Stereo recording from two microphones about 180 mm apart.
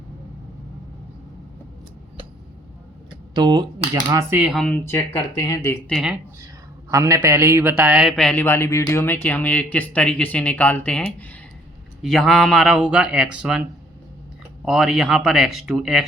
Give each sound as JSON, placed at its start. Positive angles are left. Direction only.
{"t": 3.3, "sound": "speech", "side_deg": -25}
{"t": 4.5, "sound": "speech", "side_deg": 5}
{"t": 5.9, "sound": "speech", "side_deg": -5}
{"t": 6.9, "sound": "speech", "side_deg": -15}
{"t": 14.6, "sound": "speech", "side_deg": 0}